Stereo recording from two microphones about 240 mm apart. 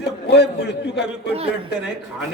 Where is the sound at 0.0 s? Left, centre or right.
Left.